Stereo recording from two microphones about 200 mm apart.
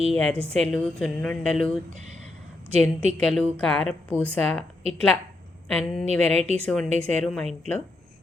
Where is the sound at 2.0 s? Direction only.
35° right (ahead or behind).